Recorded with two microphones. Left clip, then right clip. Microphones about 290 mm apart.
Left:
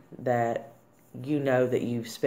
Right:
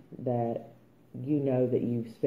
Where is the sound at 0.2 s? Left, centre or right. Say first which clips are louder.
Left 5 dB; left.